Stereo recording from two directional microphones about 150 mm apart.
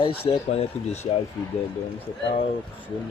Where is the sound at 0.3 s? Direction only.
35° left (ahead or behind).